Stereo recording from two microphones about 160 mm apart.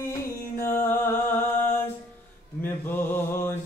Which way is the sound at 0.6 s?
15° left (ahead or behind).